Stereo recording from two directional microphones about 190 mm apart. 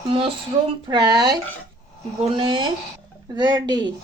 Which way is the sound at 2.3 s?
25° right (ahead or behind).